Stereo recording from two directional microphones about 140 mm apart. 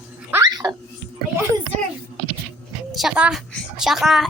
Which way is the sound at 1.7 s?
60° right (ahead or behind).